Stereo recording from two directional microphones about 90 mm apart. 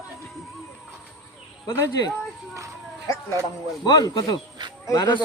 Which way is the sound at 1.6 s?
35° left (ahead or behind).